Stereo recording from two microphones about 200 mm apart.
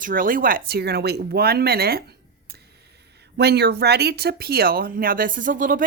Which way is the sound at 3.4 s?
55° right (ahead or behind).